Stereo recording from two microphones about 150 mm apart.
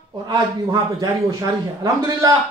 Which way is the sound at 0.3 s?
25° right (ahead or behind).